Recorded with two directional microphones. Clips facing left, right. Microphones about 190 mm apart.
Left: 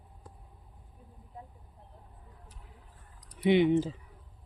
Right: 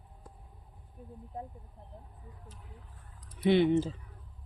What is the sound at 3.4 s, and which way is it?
Speech, 15° left (ahead or behind).